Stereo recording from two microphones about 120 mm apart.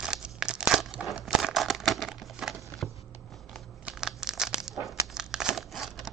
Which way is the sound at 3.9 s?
5° right (ahead or behind).